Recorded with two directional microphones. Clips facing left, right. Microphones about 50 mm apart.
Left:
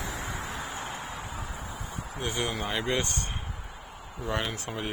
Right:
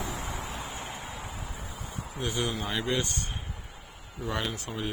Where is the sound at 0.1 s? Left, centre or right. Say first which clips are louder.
Even; left.